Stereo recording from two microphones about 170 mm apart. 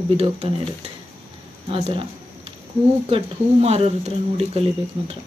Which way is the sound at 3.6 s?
35° right (ahead or behind).